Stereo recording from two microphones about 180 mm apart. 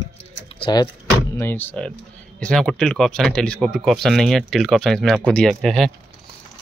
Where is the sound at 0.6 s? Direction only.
25° left (ahead or behind).